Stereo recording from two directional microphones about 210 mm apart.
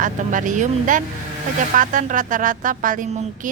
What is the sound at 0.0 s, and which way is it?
A woman's voice, 35° right (ahead or behind).